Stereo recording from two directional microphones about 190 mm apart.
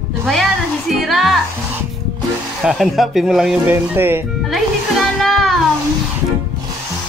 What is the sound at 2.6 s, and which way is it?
Speech, centre (ahead or behind).